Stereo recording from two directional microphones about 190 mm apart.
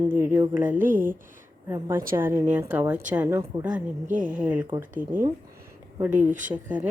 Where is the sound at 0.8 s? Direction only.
45° right (ahead or behind).